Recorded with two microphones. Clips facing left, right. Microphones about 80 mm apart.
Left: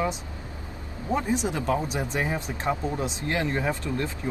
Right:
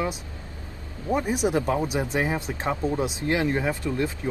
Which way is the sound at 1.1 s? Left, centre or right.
Centre.